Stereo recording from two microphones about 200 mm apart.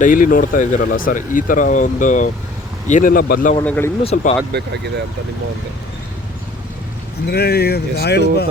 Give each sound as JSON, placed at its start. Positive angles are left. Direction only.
{"t": 0.0, "sound": "speech", "side_deg": 45}
{"t": 3.6, "sound": "speech", "side_deg": 10}
{"t": 4.0, "sound": "speech", "side_deg": 35}
{"t": 4.5, "sound": "speech", "side_deg": -55}
{"t": 7.3, "sound": "speech", "side_deg": 50}